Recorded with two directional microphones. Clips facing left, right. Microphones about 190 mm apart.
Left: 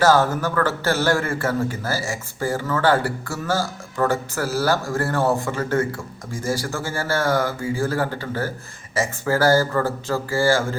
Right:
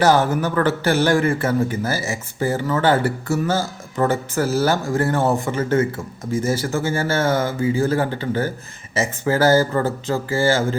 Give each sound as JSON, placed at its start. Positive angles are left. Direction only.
{"t": 0.0, "sound": "a man's voice", "side_deg": -20}